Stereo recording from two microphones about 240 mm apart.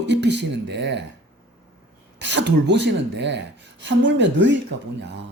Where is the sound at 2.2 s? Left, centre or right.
Right.